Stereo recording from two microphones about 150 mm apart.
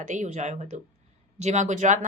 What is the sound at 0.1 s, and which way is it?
A woman's voice, 50° right (ahead or behind).